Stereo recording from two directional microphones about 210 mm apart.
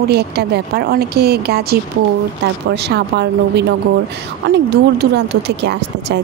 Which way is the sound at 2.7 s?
50° right (ahead or behind).